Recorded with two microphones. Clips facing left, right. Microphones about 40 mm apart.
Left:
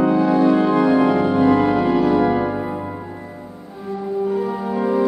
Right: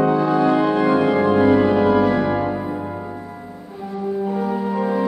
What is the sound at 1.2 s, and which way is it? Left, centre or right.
Organ, centre.